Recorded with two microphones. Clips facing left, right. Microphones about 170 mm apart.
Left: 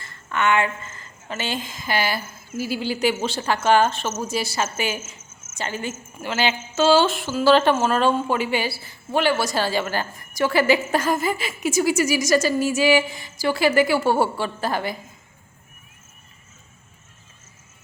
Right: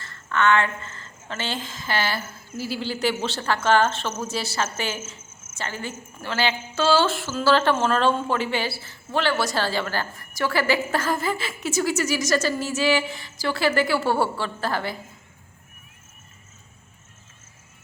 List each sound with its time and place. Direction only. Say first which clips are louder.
0.0 s a woman's voice: right 1 dB; 15° left (ahead or behind)